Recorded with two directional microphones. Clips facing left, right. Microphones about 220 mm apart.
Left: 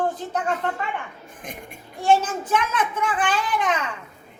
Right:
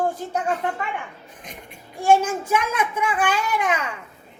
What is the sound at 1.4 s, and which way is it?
Speech, 50° left (ahead or behind).